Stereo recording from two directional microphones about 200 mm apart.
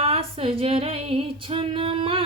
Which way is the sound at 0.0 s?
30° right (ahead or behind).